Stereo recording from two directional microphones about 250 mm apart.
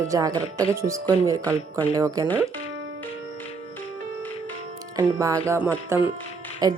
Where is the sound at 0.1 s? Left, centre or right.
Centre.